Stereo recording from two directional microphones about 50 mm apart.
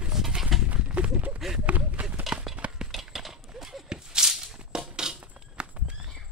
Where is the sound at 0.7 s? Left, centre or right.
Right.